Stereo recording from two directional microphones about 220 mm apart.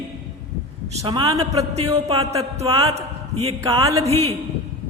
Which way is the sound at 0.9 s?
20° right (ahead or behind).